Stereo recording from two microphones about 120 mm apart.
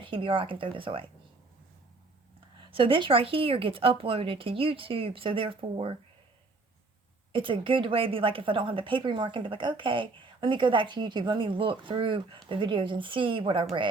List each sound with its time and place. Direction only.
0.0 s a woman's voice: 45° right (ahead or behind)
2.6 s a woman's voice: 50° right (ahead or behind)
7.3 s a woman's voice: 45° right (ahead or behind)